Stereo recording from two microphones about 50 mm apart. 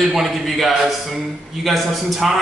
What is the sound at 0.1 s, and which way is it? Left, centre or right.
A man's voice, centre.